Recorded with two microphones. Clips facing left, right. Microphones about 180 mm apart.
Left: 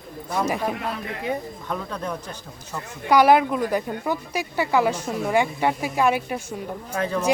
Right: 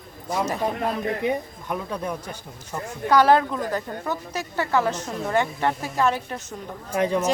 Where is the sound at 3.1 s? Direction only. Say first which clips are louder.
Left 1 dB; 10° left (ahead or behind).